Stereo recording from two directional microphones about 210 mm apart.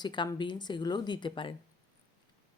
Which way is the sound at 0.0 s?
20° left (ahead or behind).